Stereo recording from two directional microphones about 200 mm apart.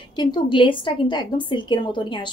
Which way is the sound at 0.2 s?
20° left (ahead or behind).